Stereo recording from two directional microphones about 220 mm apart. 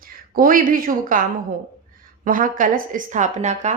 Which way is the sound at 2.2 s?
40° right (ahead or behind).